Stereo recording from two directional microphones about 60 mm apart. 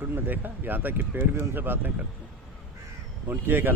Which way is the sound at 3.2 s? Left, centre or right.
Right.